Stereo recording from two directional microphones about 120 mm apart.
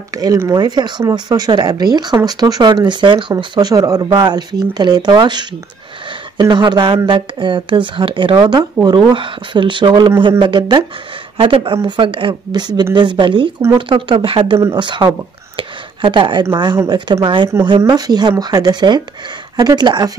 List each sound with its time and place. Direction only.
0.1 s speech: 30° right (ahead or behind)
6.5 s speech: 40° right (ahead or behind)
8.4 s speech: 35° right (ahead or behind)
15.5 s chopping: 45° right (ahead or behind)
17.2 s speech: 45° right (ahead or behind)